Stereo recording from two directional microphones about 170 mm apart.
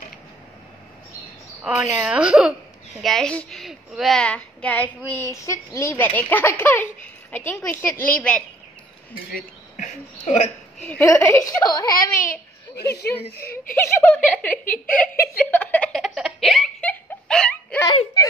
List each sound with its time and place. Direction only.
1.6 s a woman's voice: 10° right (ahead or behind); by 8.5 s 5° left (ahead or behind)
9.3 s speech: 45° left (ahead or behind)
10.9 s a child's voice: 15° left (ahead or behind)
13.8 s a woman's voice: 15° left (ahead or behind)
14.7 s a sound: 10° left (ahead or behind)
17.8 s a child's voice: 25° left (ahead or behind)